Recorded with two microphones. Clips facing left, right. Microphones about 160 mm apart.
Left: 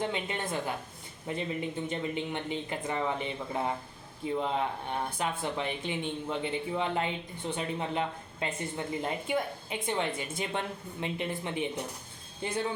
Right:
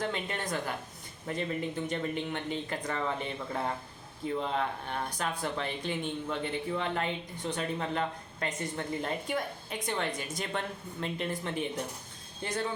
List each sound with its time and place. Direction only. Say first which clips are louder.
0.0 s a woman's voice: left 1 dB; 20° left (ahead or behind)